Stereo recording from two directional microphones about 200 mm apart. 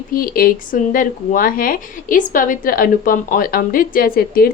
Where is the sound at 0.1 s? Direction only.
45° left (ahead or behind).